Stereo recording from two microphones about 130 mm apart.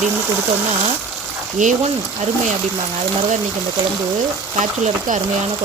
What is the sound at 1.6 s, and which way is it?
Speech, 75° right (ahead or behind).